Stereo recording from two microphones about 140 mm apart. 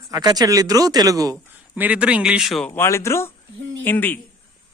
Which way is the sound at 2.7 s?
20° left (ahead or behind).